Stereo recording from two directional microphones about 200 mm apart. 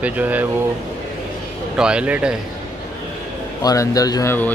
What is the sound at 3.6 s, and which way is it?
Speech, 15° left (ahead or behind).